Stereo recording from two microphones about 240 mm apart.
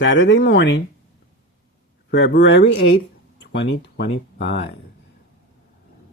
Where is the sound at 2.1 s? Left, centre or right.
Left.